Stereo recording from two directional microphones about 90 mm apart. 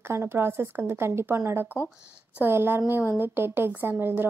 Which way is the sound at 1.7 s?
25° left (ahead or behind).